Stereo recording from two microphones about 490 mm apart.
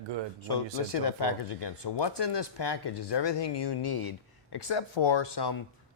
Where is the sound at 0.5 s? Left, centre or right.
Left.